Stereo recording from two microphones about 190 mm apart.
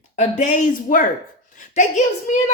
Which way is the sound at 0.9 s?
45° left (ahead or behind).